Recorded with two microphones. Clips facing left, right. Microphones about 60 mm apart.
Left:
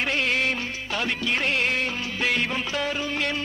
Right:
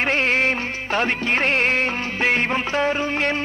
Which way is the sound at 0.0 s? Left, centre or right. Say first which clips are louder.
Right 5 dB; right.